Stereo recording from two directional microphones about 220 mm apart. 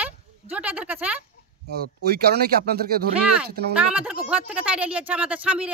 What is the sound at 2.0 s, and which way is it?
Speech, 45° right (ahead or behind).